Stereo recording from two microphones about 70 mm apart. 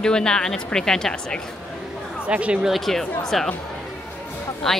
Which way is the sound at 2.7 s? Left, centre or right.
Centre.